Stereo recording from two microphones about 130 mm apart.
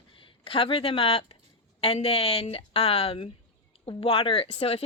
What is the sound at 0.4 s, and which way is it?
Speech, 45° left (ahead or behind).